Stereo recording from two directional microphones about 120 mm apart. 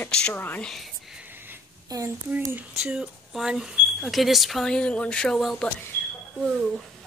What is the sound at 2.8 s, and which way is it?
Speech, 5° right (ahead or behind).